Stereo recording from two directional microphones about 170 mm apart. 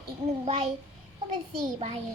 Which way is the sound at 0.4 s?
35° right (ahead or behind).